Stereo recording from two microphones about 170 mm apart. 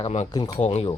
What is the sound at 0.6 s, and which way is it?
Speech, 40° left (ahead or behind).